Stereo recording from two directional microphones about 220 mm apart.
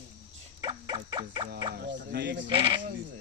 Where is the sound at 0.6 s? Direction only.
20° right (ahead or behind).